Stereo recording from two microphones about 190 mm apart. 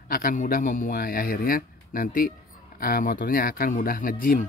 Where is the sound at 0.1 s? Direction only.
45° left (ahead or behind).